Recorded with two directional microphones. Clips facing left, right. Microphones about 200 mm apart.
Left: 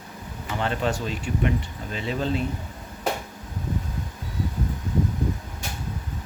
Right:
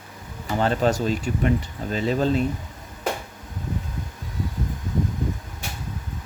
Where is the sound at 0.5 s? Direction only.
40° right (ahead or behind).